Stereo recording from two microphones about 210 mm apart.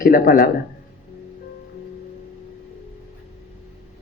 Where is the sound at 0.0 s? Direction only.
45° left (ahead or behind).